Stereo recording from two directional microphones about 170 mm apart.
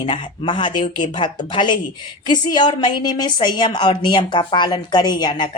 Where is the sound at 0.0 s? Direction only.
30° left (ahead or behind).